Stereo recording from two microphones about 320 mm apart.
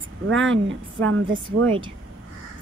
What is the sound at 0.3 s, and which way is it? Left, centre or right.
Speech, right.